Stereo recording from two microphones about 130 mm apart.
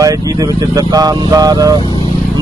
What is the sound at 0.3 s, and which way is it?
Speech, 30° right (ahead or behind).